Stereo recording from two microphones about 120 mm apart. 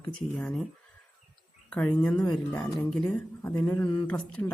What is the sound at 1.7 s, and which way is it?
Speech, 10° left (ahead or behind).